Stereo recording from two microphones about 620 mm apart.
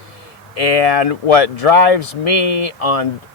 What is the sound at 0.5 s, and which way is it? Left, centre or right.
Speech, left.